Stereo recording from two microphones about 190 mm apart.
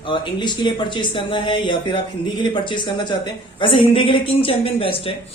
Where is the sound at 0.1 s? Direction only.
25° left (ahead or behind).